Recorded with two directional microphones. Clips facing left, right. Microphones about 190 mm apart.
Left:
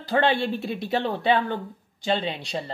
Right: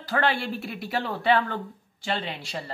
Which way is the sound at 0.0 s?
20° left (ahead or behind).